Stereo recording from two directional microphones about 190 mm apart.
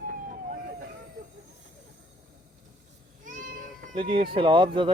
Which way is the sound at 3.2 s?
45° right (ahead or behind).